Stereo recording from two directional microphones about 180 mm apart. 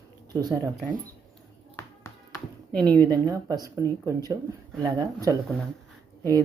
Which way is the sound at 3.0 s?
20° right (ahead or behind).